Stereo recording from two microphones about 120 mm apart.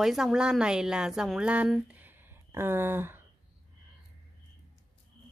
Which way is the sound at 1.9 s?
15° right (ahead or behind).